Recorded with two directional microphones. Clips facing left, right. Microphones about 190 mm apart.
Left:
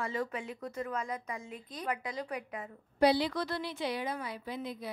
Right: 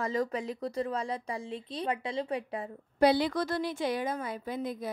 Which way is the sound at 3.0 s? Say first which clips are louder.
Right 2 dB; 50° right (ahead or behind).